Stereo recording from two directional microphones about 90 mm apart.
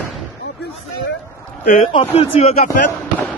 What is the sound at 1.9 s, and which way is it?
Speech, 80° left.